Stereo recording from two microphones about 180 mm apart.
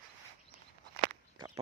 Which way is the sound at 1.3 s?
20° right (ahead or behind).